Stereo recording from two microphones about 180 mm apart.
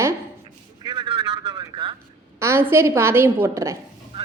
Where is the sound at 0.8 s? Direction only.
25° right (ahead or behind).